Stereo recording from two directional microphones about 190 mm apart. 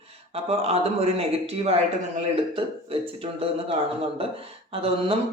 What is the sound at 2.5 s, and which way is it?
Music, 30° right (ahead or behind).